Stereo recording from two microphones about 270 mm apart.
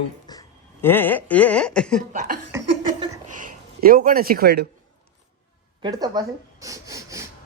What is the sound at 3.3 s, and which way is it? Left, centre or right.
Speech, right.